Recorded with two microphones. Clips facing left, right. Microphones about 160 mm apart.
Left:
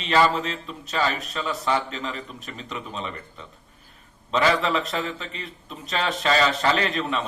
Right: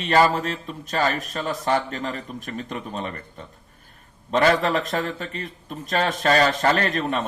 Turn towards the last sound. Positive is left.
turn(degrees=-45)  # may be behind; listen again after turning